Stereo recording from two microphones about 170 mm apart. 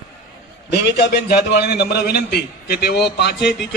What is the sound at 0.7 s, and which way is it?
A man's voice, 75° left (ahead or behind).